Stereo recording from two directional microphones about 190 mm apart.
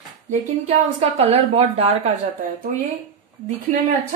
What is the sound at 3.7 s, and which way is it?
Speech, 40° right (ahead or behind).